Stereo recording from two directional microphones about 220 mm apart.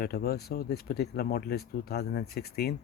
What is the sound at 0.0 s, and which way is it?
Speech, 45° left (ahead or behind).